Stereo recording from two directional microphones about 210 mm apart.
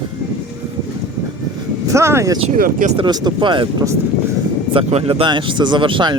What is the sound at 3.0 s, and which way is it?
Speech, 20° right (ahead or behind).